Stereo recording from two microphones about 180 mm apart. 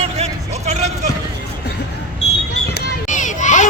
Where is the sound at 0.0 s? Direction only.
35° right (ahead or behind).